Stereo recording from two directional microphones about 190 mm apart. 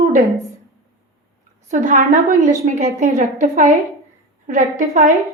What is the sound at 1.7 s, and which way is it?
A woman's voice, 40° right (ahead or behind).